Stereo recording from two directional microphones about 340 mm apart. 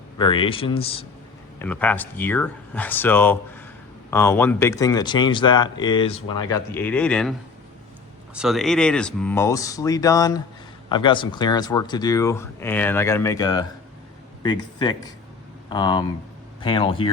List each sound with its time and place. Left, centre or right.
0.2 s speech: centre
1.5 s speech: centre
8.4 s speech: centre